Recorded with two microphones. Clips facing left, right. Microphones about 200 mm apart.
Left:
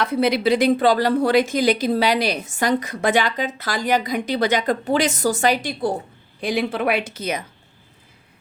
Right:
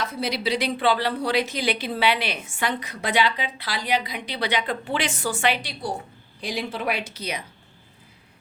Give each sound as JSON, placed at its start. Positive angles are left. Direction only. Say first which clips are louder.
{"t": 0.0, "sound": "a woman's voice", "louder": "left 8 dB", "side_deg": 60}
{"t": 6.4, "sound": "a woman's voice", "louder": "left 7 dB", "side_deg": 55}